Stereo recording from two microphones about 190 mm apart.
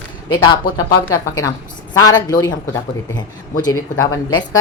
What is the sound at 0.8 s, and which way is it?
A woman's voice, 20° left (ahead or behind).